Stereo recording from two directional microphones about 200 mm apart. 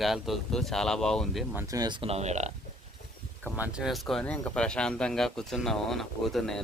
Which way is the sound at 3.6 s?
5° right (ahead or behind).